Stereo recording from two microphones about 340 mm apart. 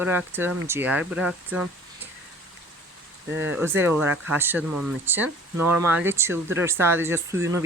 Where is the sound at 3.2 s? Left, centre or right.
Right.